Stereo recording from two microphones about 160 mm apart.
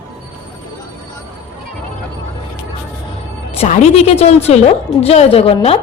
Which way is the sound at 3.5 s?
40° left (ahead or behind).